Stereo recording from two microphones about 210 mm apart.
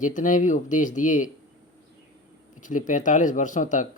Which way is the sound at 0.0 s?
35° left (ahead or behind).